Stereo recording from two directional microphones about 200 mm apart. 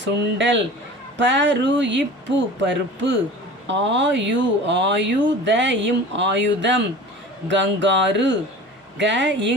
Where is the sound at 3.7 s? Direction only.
65° right (ahead or behind).